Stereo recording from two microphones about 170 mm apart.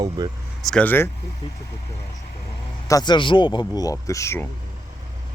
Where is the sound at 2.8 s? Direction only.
20° left (ahead or behind).